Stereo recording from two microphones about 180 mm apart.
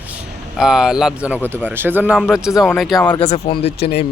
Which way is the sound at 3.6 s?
65° left (ahead or behind).